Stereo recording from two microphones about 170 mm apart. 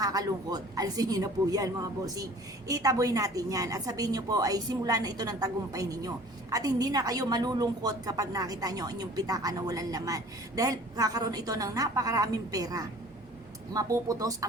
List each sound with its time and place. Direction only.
0.0 s a woman's voice: 20° right (ahead or behind)